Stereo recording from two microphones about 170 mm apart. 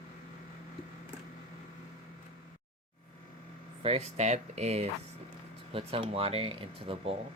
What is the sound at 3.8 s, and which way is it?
Speech, 35° right (ahead or behind).